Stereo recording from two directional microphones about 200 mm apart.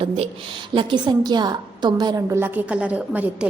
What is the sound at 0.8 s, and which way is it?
A woman's voice, 25° right (ahead or behind).